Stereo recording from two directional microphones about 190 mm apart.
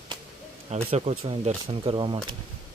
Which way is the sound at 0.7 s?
35° right (ahead or behind).